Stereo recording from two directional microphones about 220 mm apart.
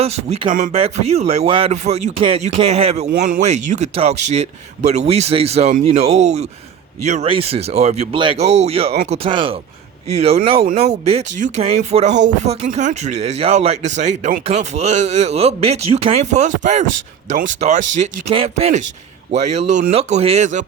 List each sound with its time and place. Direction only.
0.0 s speech: 30° right (ahead or behind)
0.5 s speech: 40° right (ahead or behind)